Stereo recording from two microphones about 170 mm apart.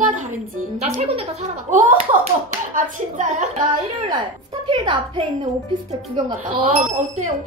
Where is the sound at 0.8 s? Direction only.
40° right (ahead or behind).